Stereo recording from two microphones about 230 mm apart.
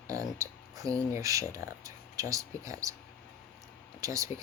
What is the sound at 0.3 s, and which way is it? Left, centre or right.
Speech, centre.